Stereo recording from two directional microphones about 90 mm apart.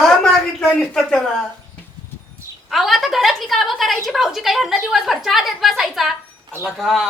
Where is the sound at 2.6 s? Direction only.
Centre (ahead or behind).